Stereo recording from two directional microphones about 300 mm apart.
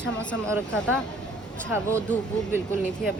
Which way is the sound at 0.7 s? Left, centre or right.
Centre.